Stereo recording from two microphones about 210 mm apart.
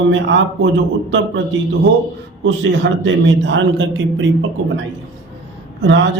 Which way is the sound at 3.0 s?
60° right (ahead or behind).